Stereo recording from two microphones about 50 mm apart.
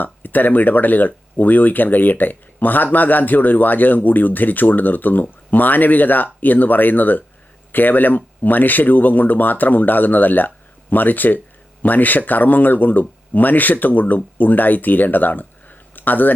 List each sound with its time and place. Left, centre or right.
0.0 s speech: left